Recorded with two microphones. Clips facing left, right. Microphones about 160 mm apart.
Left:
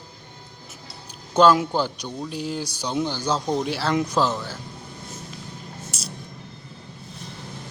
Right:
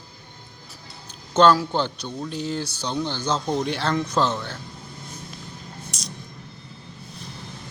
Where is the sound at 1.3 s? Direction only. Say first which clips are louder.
Even; 10° left (ahead or behind).